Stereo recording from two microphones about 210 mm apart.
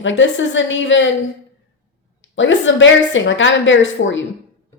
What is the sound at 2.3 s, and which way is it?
A woman's voice, 60° left (ahead or behind).